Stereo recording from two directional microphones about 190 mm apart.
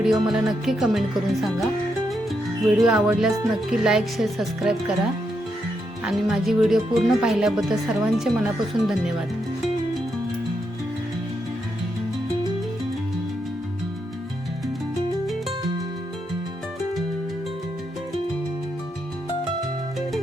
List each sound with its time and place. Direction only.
0.0 s speech: centre (ahead or behind)
6.1 s speech: centre (ahead or behind)